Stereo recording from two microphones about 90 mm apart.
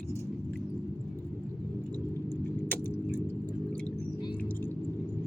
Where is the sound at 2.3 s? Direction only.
20° left (ahead or behind).